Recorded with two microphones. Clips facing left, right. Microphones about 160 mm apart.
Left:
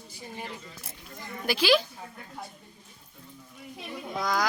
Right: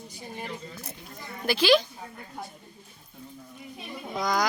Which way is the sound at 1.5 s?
10° left (ahead or behind).